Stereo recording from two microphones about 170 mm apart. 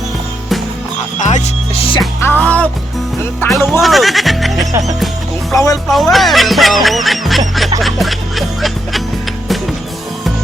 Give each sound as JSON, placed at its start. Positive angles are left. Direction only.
{"t": 1.2, "sound": "music", "side_deg": 45}
{"t": 2.2, "sound": "music", "side_deg": 10}
{"t": 3.4, "sound": "speech", "side_deg": 5}
{"t": 5.5, "sound": "speech", "side_deg": 20}
{"t": 5.9, "sound": "speech", "side_deg": 0}